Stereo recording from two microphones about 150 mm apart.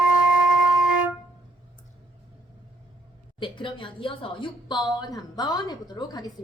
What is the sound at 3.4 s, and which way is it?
A woman's voice, 35° left (ahead or behind).